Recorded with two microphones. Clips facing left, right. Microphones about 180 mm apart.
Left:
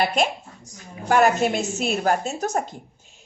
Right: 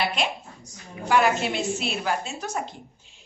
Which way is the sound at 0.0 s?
45° left (ahead or behind).